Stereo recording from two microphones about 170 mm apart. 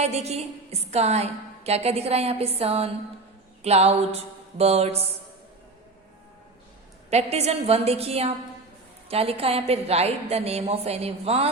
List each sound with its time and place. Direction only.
0.0 s a woman's voice: 40° right (ahead or behind)
7.1 s a woman's voice: 40° right (ahead or behind)